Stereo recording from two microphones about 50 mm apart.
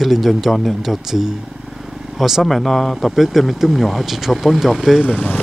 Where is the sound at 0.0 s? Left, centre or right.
Centre.